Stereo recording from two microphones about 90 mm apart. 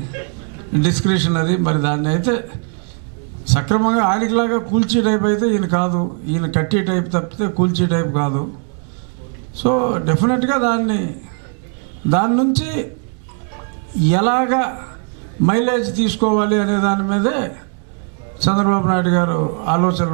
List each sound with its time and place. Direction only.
0.7 s a man's voice: 10° right (ahead or behind)
3.4 s a man's voice: 15° right (ahead or behind)
9.6 s a man's voice: 15° right (ahead or behind)
12.1 s a man's voice: 15° right (ahead or behind)
14.0 s a man's voice: 15° right (ahead or behind)